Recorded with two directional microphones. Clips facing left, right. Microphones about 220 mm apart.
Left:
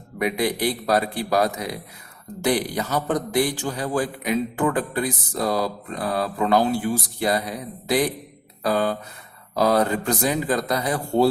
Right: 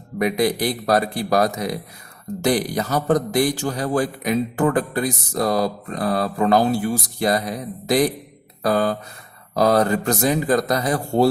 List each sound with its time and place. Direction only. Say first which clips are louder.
0.2 s speech: right 3 dB; 40° right (ahead or behind)
8.6 s a man's voice: right 2 dB; 40° right (ahead or behind)